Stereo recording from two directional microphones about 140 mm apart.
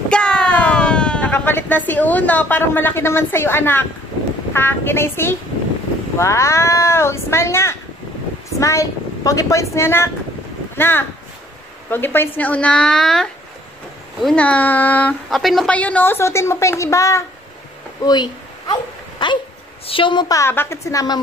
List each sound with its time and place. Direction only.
0.1 s a woman's voice: 5° left (ahead or behind)
15.2 s a woman's voice: centre (ahead or behind); by 17.2 s 20° left (ahead or behind)
18.0 s a sound: 30° left (ahead or behind)
19.9 s a woman's voice: 35° left (ahead or behind)